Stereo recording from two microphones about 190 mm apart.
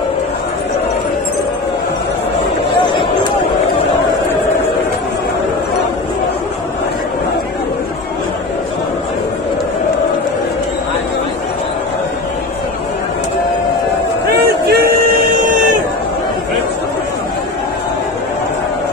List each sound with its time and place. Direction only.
14.7 s music: 50° right (ahead or behind)